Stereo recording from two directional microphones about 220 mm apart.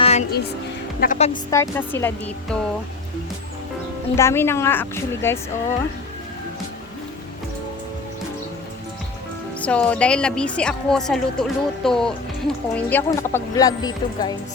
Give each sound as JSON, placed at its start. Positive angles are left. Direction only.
{"t": 0.0, "sound": "music", "side_deg": 30}
{"t": 0.9, "sound": "speech", "side_deg": 40}
{"t": 1.3, "sound": "a woman's voice", "side_deg": 15}
{"t": 4.1, "sound": "a woman's voice", "side_deg": 10}
{"t": 9.6, "sound": "speech", "side_deg": 5}